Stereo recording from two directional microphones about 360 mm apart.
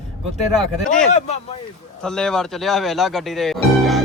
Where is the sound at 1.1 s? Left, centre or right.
Centre.